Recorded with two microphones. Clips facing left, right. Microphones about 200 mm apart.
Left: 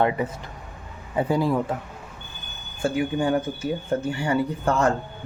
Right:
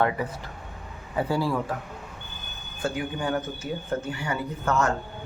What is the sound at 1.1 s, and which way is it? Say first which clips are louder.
Speech: left 4 dB; 20° left (ahead or behind).